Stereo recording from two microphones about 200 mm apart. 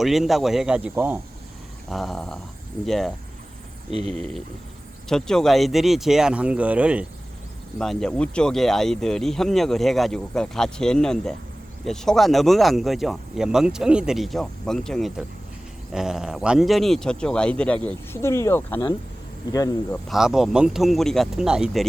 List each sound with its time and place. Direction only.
0.0 s speech: centre (ahead or behind)
1.9 s speech: centre (ahead or behind)
4.2 s speech: centre (ahead or behind)
7.8 s speech: 5° left (ahead or behind)
20.1 s speech: centre (ahead or behind)